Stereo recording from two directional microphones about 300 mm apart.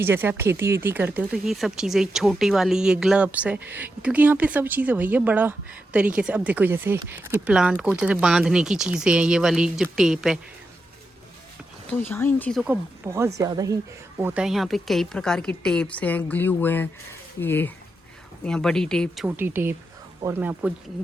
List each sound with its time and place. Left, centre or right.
0.0 s speech: centre
11.9 s speech: centre